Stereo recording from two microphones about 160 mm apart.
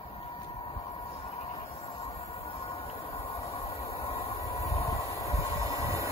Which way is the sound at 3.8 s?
20° left (ahead or behind).